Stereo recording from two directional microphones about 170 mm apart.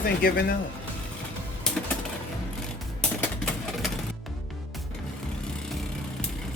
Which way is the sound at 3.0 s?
5° left (ahead or behind).